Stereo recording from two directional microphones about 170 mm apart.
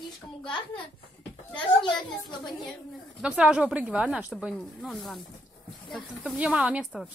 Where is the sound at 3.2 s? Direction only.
5° right (ahead or behind).